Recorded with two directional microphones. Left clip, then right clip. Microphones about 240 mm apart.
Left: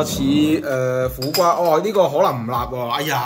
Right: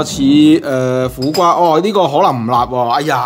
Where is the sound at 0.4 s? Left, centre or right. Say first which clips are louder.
Right 8 dB; right.